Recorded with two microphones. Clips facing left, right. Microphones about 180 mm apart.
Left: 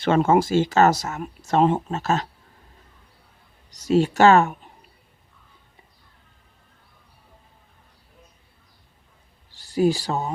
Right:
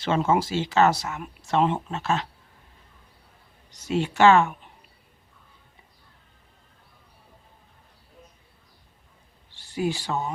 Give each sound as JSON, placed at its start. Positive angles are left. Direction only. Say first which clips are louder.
{"t": 0.0, "sound": "speech", "louder": "left 5 dB", "side_deg": 55}
{"t": 3.7, "sound": "speech", "louder": "left 7 dB", "side_deg": 40}
{"t": 9.5, "sound": "speech", "louder": "left 7 dB", "side_deg": 40}